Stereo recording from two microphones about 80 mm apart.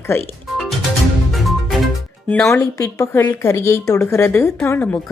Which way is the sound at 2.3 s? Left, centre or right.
Left.